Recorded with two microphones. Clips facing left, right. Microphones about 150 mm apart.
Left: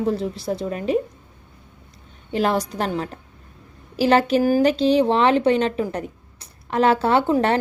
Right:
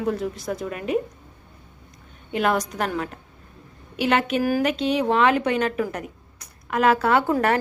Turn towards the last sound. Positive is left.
turn(degrees=30)  # may be behind; listen again after turning